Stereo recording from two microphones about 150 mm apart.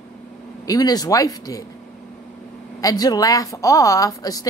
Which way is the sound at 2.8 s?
25° left (ahead or behind).